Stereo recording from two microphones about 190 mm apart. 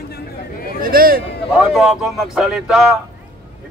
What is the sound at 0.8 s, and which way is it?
Speech, 50° right (ahead or behind).